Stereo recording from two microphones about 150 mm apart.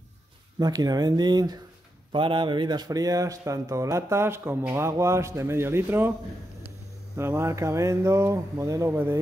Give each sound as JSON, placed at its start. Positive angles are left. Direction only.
{"t": 0.6, "sound": "speech", "side_deg": -25}
{"t": 7.2, "sound": "speech", "side_deg": -15}